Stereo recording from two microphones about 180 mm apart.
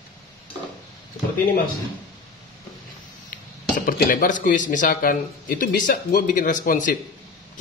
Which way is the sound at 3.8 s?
50° left (ahead or behind).